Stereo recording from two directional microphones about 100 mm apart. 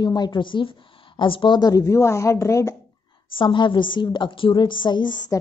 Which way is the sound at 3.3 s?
55° left (ahead or behind).